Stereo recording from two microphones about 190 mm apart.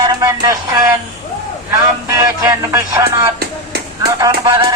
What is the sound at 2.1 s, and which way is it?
Speech, 20° right (ahead or behind).